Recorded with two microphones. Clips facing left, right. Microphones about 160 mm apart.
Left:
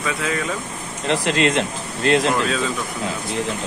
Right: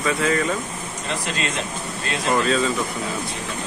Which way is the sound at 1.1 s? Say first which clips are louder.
Left 9 dB; 90° left.